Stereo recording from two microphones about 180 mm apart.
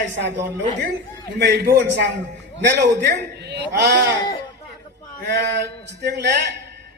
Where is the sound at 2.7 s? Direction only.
65° right (ahead or behind).